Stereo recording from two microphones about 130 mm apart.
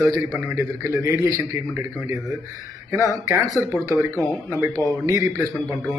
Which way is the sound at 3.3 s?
20° right (ahead or behind).